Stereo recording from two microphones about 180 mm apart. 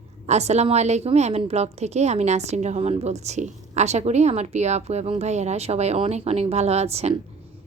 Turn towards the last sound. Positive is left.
turn(degrees=-35)  # may be behind; listen again after turning